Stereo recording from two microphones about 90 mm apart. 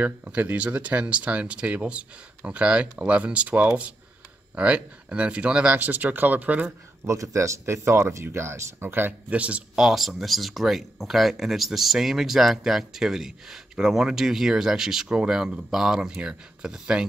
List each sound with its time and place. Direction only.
0.0 s speech: 15° right (ahead or behind)
7.1 s speech: 35° right (ahead or behind); by 17.0 s 10° right (ahead or behind)